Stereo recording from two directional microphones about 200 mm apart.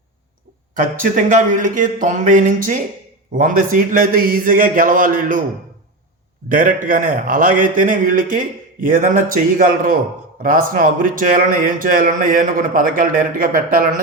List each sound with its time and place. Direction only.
0.8 s a man's voice: 40° right (ahead or behind)
6.5 s a man's voice: 45° right (ahead or behind)